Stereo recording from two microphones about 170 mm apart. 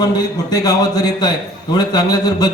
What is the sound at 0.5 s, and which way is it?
A man's voice, 20° left (ahead or behind).